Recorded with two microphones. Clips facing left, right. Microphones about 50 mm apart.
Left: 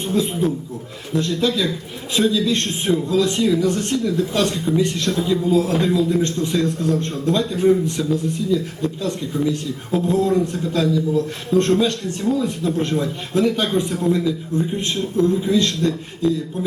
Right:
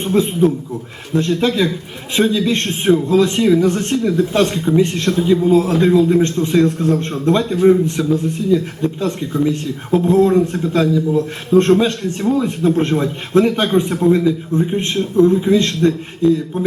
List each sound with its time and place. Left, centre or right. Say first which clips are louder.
0.0 s a man's voice: right 5 dB; right